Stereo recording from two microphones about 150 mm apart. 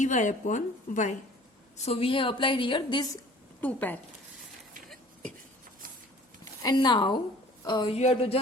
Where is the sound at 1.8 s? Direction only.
40° left (ahead or behind).